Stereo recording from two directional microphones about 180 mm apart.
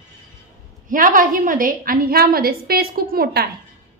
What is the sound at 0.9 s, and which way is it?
A woman's voice, 50° right (ahead or behind).